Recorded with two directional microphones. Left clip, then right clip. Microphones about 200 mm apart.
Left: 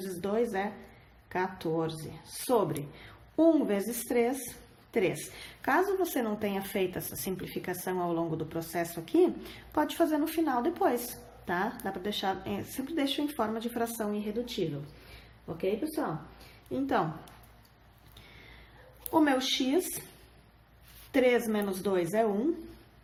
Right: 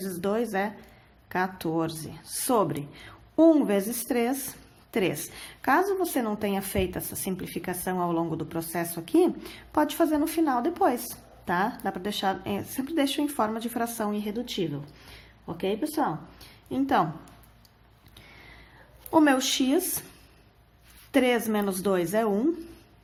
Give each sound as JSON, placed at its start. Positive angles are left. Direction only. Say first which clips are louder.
{"t": 0.0, "sound": "a sound", "louder": "right 2 dB", "side_deg": -40}
{"t": 1.3, "sound": "a woman's voice", "louder": "right 3 dB", "side_deg": -40}
{"t": 19.1, "sound": "a woman's voice", "louder": "right 5 dB", "side_deg": -40}
{"t": 21.1, "sound": "a woman's voice", "louder": "right 2 dB", "side_deg": -40}